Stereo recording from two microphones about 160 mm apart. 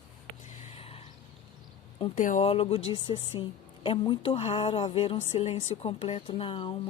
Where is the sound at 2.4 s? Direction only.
40° left (ahead or behind).